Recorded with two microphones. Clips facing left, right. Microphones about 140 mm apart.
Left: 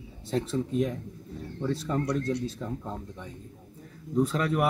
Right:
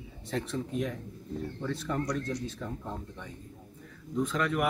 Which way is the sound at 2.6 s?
20° left (ahead or behind).